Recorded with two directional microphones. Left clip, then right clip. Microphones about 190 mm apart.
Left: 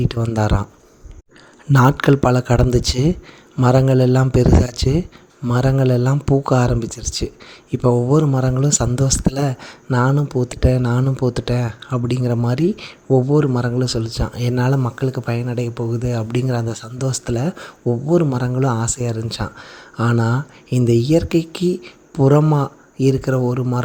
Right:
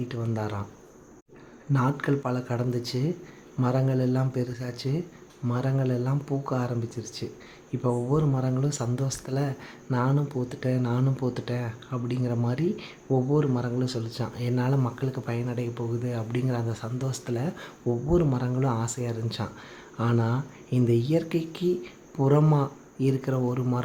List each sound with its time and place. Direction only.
0.1 s speech: 45° left (ahead or behind)
1.7 s speech: 50° left (ahead or behind); by 23.8 s 35° left (ahead or behind)